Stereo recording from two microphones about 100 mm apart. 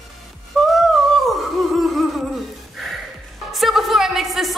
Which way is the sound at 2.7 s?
Centre (ahead or behind).